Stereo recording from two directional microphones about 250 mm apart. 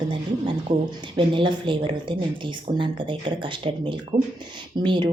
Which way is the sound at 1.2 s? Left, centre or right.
Centre.